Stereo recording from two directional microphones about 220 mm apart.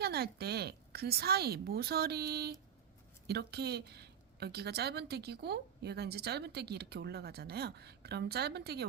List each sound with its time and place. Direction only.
0.0 s a woman's voice: 45° right (ahead or behind)